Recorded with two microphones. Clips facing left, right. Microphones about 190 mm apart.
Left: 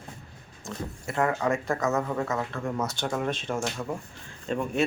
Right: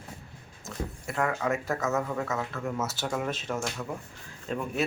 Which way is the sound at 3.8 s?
15° left (ahead or behind).